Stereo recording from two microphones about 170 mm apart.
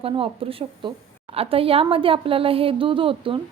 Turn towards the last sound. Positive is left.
turn(degrees=-30)  # may be behind; listen again after turning